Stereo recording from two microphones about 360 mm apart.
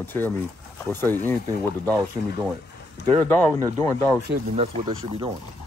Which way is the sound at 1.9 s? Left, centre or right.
Centre.